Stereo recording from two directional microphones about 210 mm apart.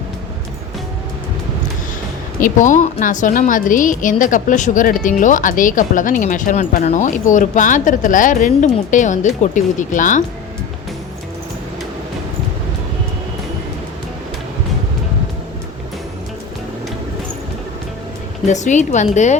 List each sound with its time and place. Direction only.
2.4 s a woman's voice: 35° left (ahead or behind)
18.4 s a woman's voice: 35° left (ahead or behind)